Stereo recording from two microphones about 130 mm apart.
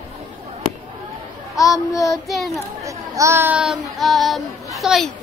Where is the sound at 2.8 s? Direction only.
25° right (ahead or behind).